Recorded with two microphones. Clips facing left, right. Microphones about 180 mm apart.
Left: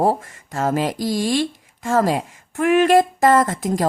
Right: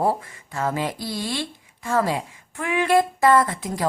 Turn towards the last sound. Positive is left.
turn(degrees=45)  # may be behind; listen again after turning